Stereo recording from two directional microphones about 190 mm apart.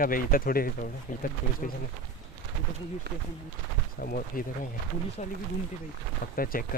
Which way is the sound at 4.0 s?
50° left (ahead or behind).